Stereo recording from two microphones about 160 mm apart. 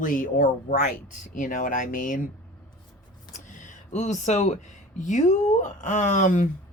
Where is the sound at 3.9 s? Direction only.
45° left (ahead or behind).